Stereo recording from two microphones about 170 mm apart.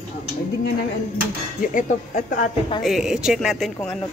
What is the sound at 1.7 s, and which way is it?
Speech, 45° left (ahead or behind).